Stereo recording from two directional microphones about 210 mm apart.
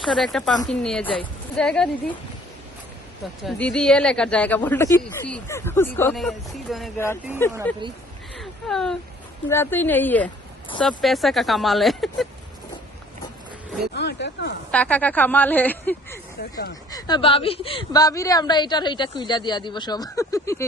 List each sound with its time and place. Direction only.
0.0 s a woman's voice: centre (ahead or behind)
3.4 s speech: 5° left (ahead or behind)
13.9 s speech: 55° left (ahead or behind)
14.7 s speech: 5° left (ahead or behind)
16.9 s a woman's voice: 25° left (ahead or behind)